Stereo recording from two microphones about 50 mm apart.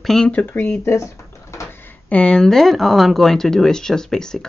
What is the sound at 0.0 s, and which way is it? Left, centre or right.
Speech, centre.